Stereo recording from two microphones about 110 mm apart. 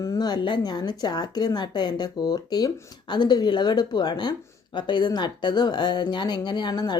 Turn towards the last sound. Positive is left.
turn(degrees=40)  # may be behind; listen again after turning